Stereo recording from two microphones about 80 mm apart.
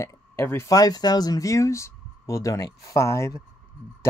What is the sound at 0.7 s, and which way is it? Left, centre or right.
Speech, left.